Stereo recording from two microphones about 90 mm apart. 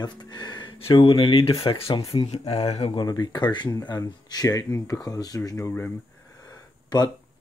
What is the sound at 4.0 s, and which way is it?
Speech, 40° left (ahead or behind).